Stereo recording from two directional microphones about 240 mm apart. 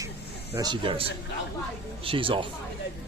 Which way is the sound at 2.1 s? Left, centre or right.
Right.